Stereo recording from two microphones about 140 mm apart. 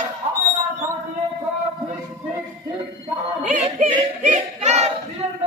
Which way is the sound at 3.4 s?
60° right (ahead or behind).